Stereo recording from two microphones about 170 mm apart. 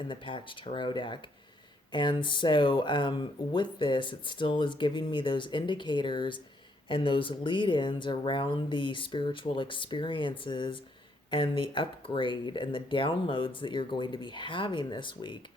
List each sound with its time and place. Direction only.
0.0 s speech: 30° left (ahead or behind)